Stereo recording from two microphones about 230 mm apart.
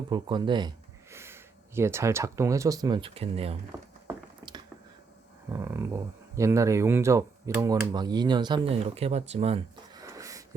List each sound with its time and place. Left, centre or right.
0.1 s speech: centre
3.7 s a sound: centre
5.5 s speech: centre